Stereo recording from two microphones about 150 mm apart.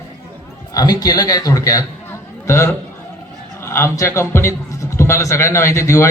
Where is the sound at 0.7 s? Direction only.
25° left (ahead or behind).